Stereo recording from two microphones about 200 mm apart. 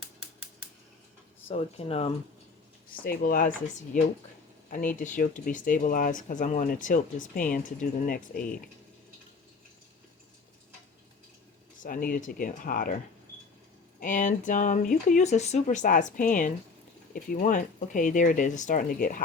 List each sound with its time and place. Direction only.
1.5 s speech: 30° left (ahead or behind)
2.9 s speech: 45° left (ahead or behind)
4.7 s speech: 45° left (ahead or behind)
11.8 s speech: 45° left (ahead or behind)
14.0 s speech: 40° left (ahead or behind)